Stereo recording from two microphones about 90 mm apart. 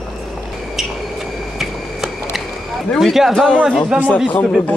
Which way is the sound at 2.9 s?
Centre (ahead or behind).